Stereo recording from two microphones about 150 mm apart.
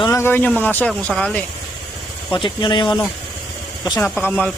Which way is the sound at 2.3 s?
30° left (ahead or behind).